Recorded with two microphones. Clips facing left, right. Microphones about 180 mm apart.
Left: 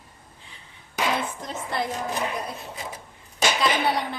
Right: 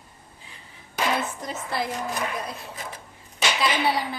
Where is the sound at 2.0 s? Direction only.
20° left (ahead or behind).